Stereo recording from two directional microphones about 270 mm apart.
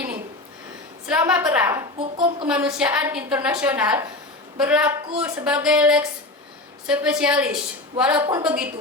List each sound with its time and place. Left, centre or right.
1.0 s a woman's voice: centre
2.5 s a woman's voice: centre